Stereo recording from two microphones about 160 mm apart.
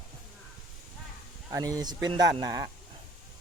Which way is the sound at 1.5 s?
20° right (ahead or behind).